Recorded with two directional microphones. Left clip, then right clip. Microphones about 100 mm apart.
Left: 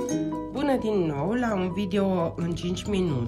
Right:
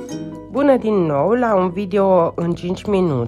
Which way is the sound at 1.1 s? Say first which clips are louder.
Right 12 dB; 50° right (ahead or behind).